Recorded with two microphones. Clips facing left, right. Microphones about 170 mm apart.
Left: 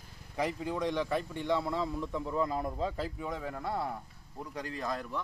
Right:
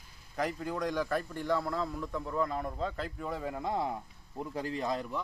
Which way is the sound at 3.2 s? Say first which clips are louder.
Right 1 dB; 5° right (ahead or behind).